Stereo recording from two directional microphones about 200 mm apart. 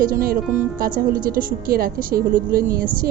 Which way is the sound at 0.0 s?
45° right (ahead or behind).